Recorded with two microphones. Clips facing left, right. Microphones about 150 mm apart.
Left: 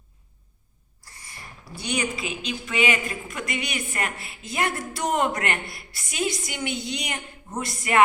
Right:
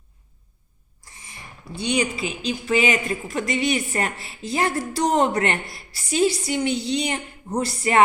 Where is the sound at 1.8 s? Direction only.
30° right (ahead or behind).